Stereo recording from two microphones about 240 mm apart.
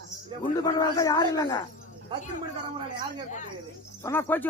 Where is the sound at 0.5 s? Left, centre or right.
Centre.